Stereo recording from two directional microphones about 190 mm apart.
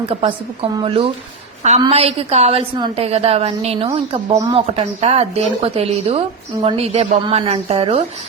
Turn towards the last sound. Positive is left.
turn(degrees=-30)  # may be behind; listen again after turning